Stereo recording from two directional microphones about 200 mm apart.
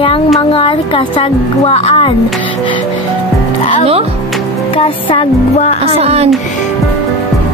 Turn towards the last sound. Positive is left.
turn(degrees=-30)  # may be behind; listen again after turning